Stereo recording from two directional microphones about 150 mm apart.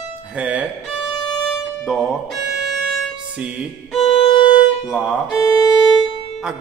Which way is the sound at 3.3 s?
5° right (ahead or behind).